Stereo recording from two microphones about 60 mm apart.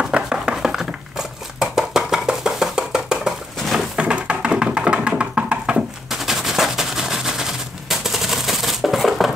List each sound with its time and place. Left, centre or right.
0.0 s a sound: centre
3.9 s music: centre
6.0 s machine gun: centre